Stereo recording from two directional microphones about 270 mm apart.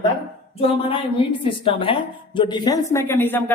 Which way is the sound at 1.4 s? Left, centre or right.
Centre.